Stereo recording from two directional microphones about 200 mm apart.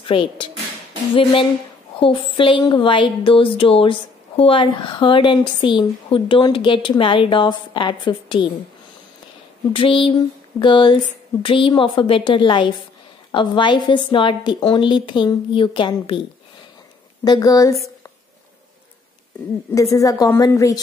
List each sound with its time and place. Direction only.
0.1 s a woman's voice: 25° left (ahead or behind)
9.7 s a woman's voice: 25° left (ahead or behind)
17.2 s a woman's voice: 20° left (ahead or behind)
19.7 s a woman's voice: 15° left (ahead or behind)